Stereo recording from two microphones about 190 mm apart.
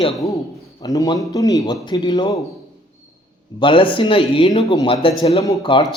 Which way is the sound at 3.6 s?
25° left (ahead or behind).